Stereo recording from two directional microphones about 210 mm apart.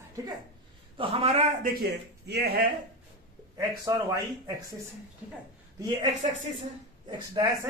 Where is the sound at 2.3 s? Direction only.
50° right (ahead or behind).